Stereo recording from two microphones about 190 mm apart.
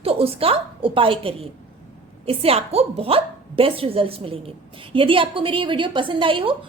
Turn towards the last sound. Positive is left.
turn(degrees=-25)  # may be behind; listen again after turning